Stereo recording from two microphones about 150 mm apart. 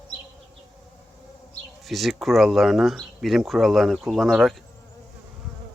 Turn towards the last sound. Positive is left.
turn(degrees=0)  # may be behind; listen again after turning